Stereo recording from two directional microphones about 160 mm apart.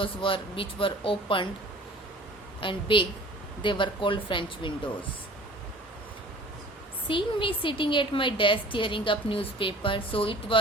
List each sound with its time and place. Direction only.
0.0 s a woman's voice: 35° left (ahead or behind)
2.6 s a woman's voice: 30° left (ahead or behind)
7.1 s a woman's voice: 30° left (ahead or behind)